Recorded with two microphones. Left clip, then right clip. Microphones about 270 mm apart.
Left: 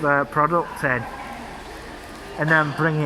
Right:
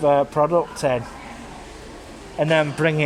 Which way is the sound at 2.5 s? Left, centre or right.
Right.